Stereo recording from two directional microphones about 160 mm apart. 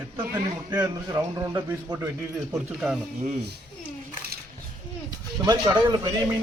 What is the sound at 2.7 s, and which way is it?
Speech, centre (ahead or behind).